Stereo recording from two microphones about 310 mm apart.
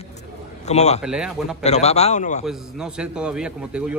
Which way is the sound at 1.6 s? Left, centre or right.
Left.